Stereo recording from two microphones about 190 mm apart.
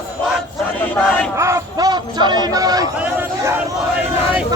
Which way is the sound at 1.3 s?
15° right (ahead or behind).